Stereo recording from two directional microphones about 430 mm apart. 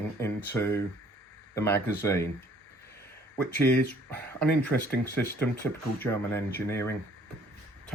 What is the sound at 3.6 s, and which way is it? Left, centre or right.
Speech, centre.